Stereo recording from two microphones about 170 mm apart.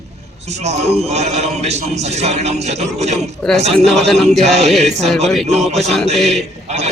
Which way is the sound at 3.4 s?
Centre (ahead or behind).